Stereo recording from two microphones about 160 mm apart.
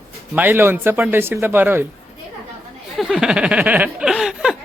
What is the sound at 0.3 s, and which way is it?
A man's voice, 10° right (ahead or behind).